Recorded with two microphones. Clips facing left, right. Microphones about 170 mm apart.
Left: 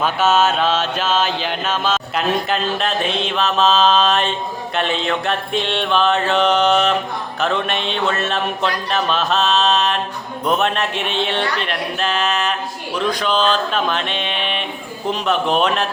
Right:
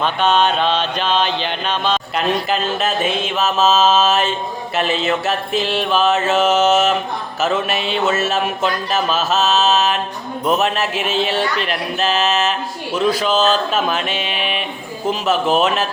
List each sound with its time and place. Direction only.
0.0 s mantra: 5° left (ahead or behind)